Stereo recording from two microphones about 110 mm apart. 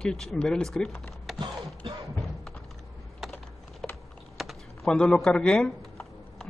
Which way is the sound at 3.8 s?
5° left (ahead or behind).